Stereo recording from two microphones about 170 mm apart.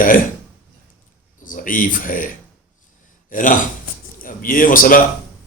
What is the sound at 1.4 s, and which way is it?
A man's voice, 50° left (ahead or behind).